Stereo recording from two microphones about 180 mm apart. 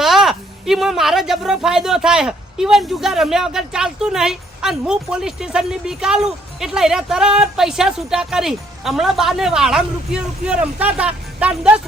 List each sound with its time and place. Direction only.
0.0 s speech: centre (ahead or behind)